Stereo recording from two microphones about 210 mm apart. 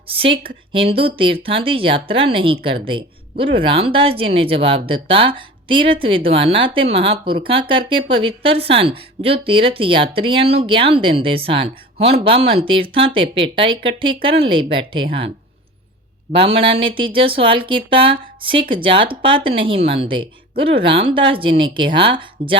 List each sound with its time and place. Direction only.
0.4 s speech: 25° right (ahead or behind)
16.3 s speech: 25° right (ahead or behind)